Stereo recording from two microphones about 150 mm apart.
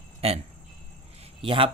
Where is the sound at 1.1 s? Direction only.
40° right (ahead or behind).